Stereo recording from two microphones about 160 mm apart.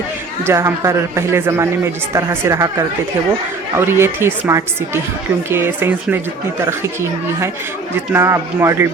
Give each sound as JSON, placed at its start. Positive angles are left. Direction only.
{"t": 0.4, "sound": "speech", "side_deg": -15}
{"t": 3.8, "sound": "speech", "side_deg": -15}